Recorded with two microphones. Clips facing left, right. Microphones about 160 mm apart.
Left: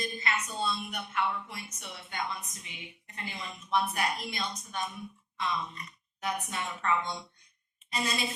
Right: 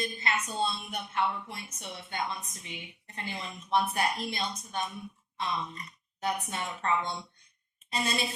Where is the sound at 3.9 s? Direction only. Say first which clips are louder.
Right 2 dB; 30° right (ahead or behind).